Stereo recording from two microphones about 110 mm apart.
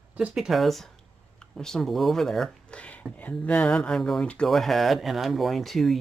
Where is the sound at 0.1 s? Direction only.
10° right (ahead or behind).